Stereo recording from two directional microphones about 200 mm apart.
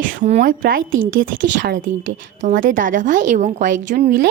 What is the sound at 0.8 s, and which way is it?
Speech, 75° right (ahead or behind).